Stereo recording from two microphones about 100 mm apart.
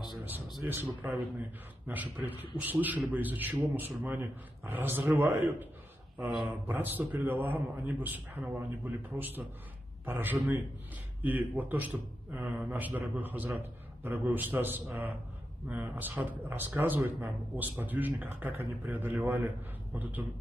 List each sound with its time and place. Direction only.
0.7 s a man's voice: 20° right (ahead or behind)
10.0 s a man's voice: 20° right (ahead or behind)